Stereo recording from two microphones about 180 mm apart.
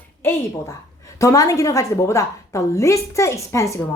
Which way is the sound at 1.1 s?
20° left (ahead or behind).